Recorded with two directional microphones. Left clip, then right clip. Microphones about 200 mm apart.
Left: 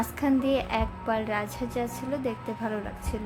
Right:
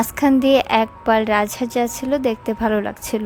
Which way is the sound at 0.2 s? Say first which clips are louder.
Right 11 dB; 50° right (ahead or behind).